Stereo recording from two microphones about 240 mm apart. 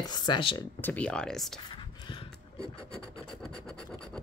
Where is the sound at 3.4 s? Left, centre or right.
Centre.